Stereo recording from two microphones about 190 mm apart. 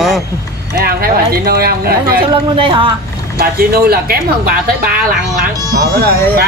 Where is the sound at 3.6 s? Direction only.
50° right (ahead or behind).